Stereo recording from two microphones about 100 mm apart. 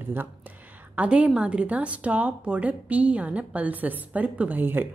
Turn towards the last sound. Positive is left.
turn(degrees=-20)  # may be behind; listen again after turning